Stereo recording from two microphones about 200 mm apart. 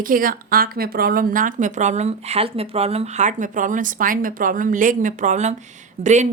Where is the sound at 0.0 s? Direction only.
45° right (ahead or behind).